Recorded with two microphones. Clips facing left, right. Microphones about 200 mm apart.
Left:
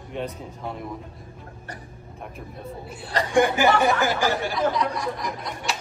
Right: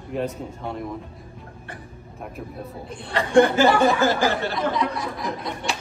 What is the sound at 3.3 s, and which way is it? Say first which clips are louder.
Speech: right 4 dB; 15° left (ahead or behind).